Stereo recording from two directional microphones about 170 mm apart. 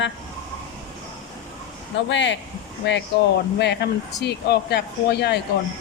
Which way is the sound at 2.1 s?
90° left.